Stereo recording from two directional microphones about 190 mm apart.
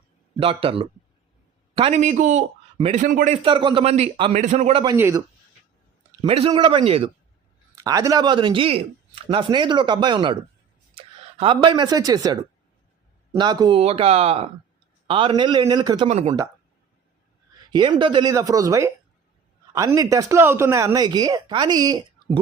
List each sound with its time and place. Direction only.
0.3 s speech: 30° right (ahead or behind)
3.0 s a man's voice: 45° right (ahead or behind)
3.4 s a man's voice: 25° right (ahead or behind)
4.9 s speech: 15° right (ahead or behind)
6.2 s speech: 30° right (ahead or behind)
7.9 s speech: 20° right (ahead or behind)
16.0 s a man's voice: 35° right (ahead or behind)
17.7 s speech: 25° right (ahead or behind)